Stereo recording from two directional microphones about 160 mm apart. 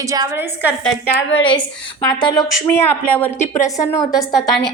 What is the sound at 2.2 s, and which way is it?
Speech, 25° left (ahead or behind).